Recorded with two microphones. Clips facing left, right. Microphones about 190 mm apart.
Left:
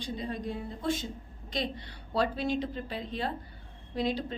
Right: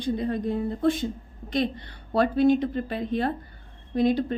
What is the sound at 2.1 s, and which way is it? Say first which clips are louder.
A woman's voice: right 9 dB; 55° right (ahead or behind).